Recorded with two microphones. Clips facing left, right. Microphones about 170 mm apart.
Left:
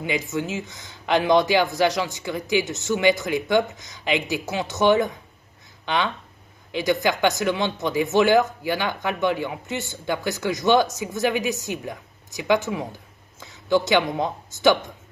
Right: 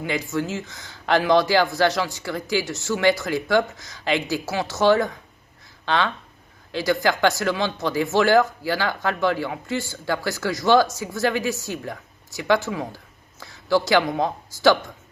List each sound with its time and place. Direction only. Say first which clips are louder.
0.0 s speech: right 1 dB; 20° left (ahead or behind)